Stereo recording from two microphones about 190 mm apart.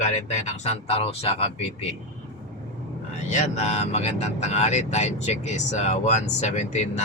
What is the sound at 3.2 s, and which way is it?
A man's voice, 35° left (ahead or behind).